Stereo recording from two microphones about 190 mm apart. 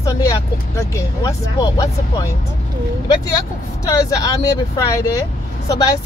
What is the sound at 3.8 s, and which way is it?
Speech, 15° left (ahead or behind).